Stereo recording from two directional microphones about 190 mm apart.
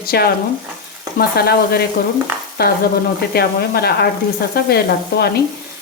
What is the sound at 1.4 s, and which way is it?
Stir, 55° left (ahead or behind).